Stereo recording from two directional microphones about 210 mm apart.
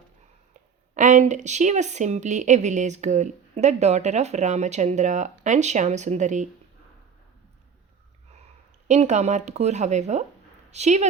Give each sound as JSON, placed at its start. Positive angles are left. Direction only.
{"t": 0.9, "sound": "speech", "side_deg": -35}
{"t": 8.9, "sound": "a woman's voice", "side_deg": -35}